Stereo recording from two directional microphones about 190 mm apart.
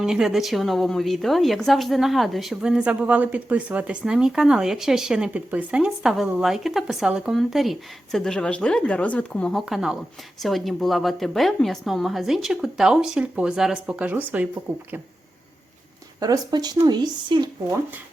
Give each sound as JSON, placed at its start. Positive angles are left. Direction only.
{"t": 0.0, "sound": "a woman's voice", "side_deg": -5}
{"t": 16.2, "sound": "speech", "side_deg": -20}